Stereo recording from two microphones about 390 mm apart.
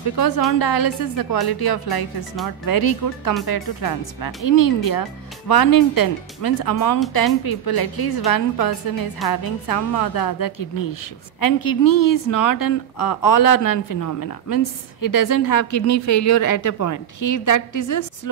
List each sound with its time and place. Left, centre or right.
0.1 s a woman's voice: left